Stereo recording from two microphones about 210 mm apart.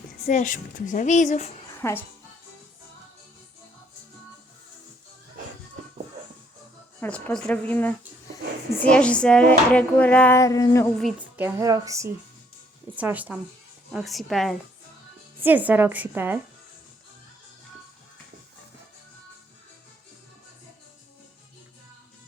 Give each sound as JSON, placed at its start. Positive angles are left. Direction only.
{"t": 0.3, "sound": "a woman's voice", "side_deg": 35}
{"t": 1.8, "sound": "dishes", "side_deg": 10}
{"t": 7.0, "sound": "dishes", "side_deg": 5}
{"t": 10.9, "sound": "a woman's voice", "side_deg": -5}